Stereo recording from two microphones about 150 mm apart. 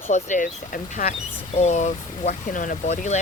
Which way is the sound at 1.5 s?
50° left (ahead or behind).